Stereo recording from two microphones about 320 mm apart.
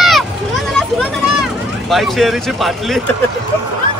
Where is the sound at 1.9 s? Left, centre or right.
Centre.